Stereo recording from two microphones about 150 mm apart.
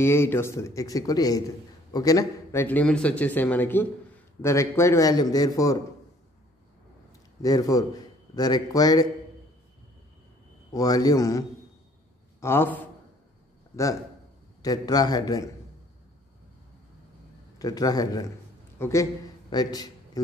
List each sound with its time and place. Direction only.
0.0 s a man's voice: 15° left (ahead or behind)
7.4 s a man's voice: 25° left (ahead or behind)
10.7 s a man's voice: 25° left (ahead or behind)
14.6 s a man's voice: 25° left (ahead or behind)
17.6 s a man's voice: 25° left (ahead or behind)